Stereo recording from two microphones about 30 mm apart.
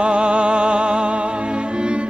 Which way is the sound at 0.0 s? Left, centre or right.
Right.